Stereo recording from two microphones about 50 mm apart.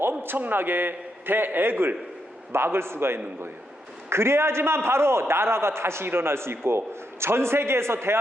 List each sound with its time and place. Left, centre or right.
0.0 s a man's voice: right
2.5 s a man's voice: right